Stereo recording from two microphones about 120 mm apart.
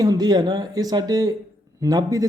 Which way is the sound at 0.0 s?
30° right (ahead or behind).